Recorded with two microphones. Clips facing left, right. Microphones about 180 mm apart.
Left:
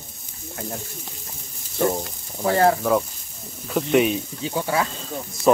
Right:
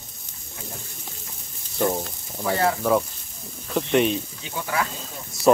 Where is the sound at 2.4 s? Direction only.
45° left (ahead or behind).